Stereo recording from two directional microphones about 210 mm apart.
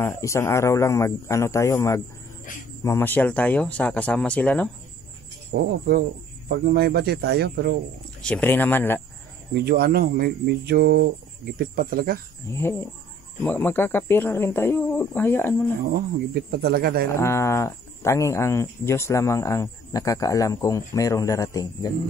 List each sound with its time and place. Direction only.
0.0 s speech: 15° left (ahead or behind)
5.5 s speech: 50° right (ahead or behind)
8.2 s speech: 5° left (ahead or behind)
9.5 s speech: 45° right (ahead or behind)
12.5 s speech: 10° left (ahead or behind)
15.8 s speech: 45° right (ahead or behind)
17.1 s speech: 15° left (ahead or behind)